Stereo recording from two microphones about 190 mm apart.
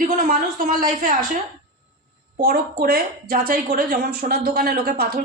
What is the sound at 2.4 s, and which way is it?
Speech, 50° right (ahead or behind).